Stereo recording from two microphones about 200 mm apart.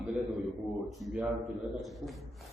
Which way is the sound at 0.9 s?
Centre (ahead or behind).